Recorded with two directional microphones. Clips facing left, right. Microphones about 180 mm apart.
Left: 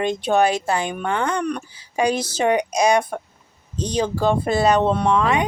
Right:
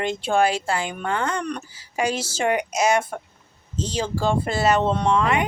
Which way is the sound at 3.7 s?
15° left (ahead or behind).